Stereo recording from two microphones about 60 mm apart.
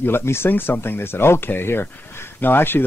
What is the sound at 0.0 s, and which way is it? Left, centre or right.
Speech, left.